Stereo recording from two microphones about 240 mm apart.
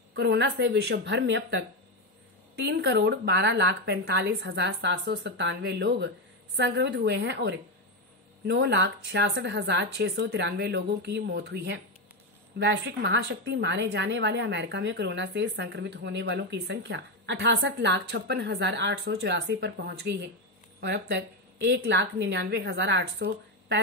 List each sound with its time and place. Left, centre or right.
0.1 s a woman's voice: right